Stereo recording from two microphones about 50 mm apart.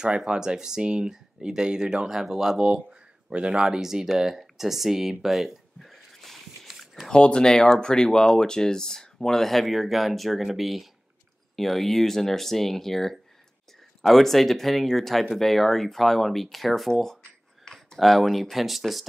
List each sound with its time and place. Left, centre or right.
0.0 s speech: centre
5.2 s a sound: centre
7.1 s speech: centre